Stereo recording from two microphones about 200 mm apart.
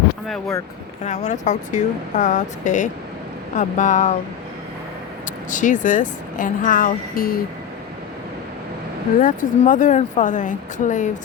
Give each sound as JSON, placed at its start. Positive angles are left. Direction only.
{"t": 1.0, "sound": "speech", "side_deg": 35}
{"t": 5.5, "sound": "speech", "side_deg": 40}
{"t": 9.2, "sound": "speech", "side_deg": 40}